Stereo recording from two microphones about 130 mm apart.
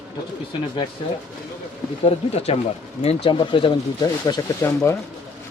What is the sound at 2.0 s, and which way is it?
Speech, 55° left (ahead or behind).